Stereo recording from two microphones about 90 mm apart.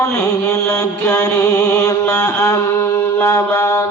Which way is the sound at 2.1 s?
35° left (ahead or behind).